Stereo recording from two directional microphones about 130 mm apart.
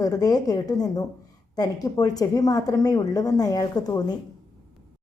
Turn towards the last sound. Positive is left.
turn(degrees=30)  # may be behind; listen again after turning